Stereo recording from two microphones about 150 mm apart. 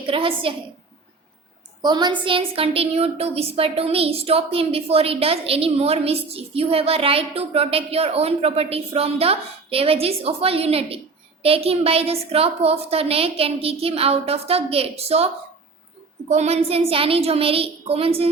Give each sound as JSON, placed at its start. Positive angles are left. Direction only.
{"t": 0.1, "sound": "a woman's voice", "side_deg": -35}
{"t": 1.8, "sound": "a woman's voice", "side_deg": -30}
{"t": 16.3, "sound": "a woman's voice", "side_deg": -45}